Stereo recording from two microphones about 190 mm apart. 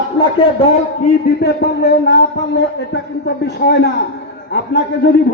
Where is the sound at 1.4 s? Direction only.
60° left (ahead or behind).